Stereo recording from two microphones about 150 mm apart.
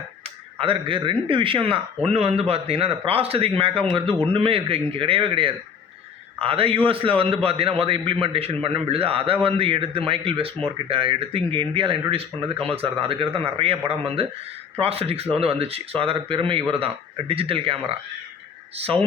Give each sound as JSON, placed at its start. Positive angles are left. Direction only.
{"t": 0.6, "sound": "a man's voice", "side_deg": -35}